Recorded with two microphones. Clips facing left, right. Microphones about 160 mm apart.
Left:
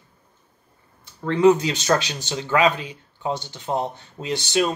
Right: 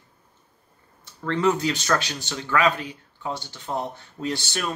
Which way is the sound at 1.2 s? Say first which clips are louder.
Left 6 dB; 15° left (ahead or behind).